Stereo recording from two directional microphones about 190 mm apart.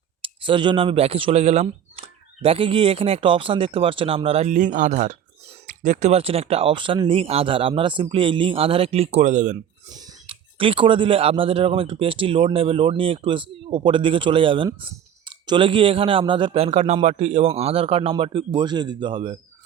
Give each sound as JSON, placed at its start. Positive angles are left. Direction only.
{"t": 0.2, "sound": "speech", "side_deg": -25}
{"t": 9.9, "sound": "speech", "side_deg": -20}